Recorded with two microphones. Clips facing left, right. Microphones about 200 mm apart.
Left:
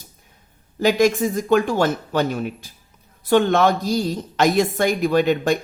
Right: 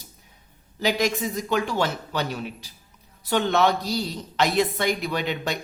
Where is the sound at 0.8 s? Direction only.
50° left (ahead or behind).